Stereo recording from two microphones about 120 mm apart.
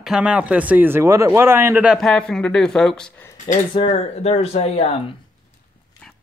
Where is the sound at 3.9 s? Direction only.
60° left (ahead or behind).